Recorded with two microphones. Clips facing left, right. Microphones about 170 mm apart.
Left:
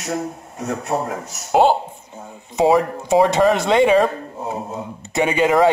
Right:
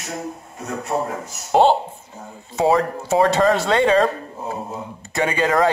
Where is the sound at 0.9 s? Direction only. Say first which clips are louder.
Even; 70° left (ahead or behind).